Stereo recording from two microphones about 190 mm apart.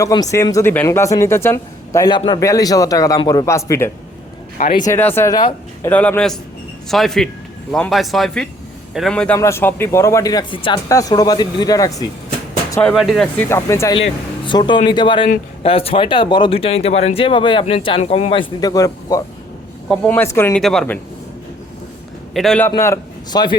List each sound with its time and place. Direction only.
0.0 s speech: 20° left (ahead or behind)
12.8 s speech: centre (ahead or behind)
13.4 s speech: 15° left (ahead or behind)
13.9 s speech: 25° left (ahead or behind); by 21.0 s 5° left (ahead or behind)
22.4 s speech: 5° left (ahead or behind)
22.7 s a man's voice: 20° left (ahead or behind)